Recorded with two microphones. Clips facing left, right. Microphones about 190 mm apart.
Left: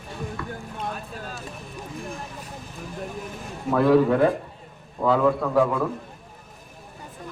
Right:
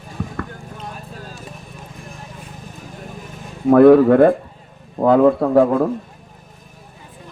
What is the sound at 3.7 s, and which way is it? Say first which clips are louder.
A man's voice: right 9 dB; 55° right (ahead or behind).